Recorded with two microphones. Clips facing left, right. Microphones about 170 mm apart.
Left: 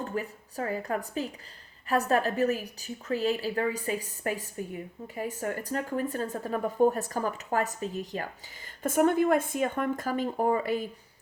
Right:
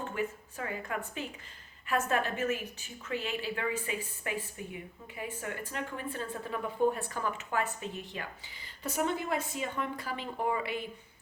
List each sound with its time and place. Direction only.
0.0 s a woman's voice: 40° left (ahead or behind)